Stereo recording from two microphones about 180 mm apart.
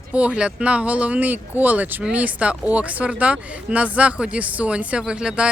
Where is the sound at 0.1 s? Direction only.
5° right (ahead or behind).